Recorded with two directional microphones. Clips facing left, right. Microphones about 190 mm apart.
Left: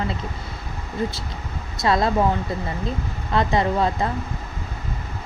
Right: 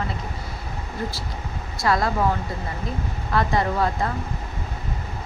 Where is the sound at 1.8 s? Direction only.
25° left (ahead or behind).